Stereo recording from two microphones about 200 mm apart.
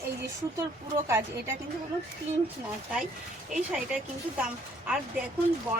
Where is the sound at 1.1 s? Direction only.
10° right (ahead or behind).